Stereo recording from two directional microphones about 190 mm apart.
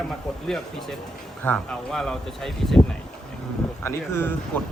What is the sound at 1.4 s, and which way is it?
Speech, 5° left (ahead or behind).